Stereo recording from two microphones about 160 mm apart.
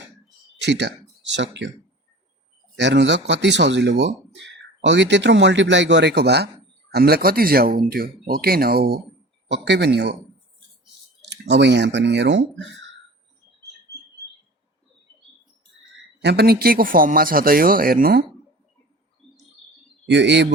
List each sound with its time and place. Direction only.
0.6 s speech: 90° right
2.7 s speech: 90° right
6.9 s speech: 75° right (ahead or behind)
11.3 s speech: 90° right
16.2 s speech: 85° right; by 18.2 s 65° right (ahead or behind)
20.1 s speech: 90° right